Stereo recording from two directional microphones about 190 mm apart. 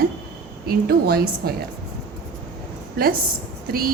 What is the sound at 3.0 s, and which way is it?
Speech, 55° right (ahead or behind).